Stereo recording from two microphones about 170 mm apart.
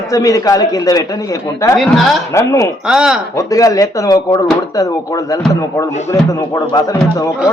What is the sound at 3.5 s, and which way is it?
Speech, 20° left (ahead or behind).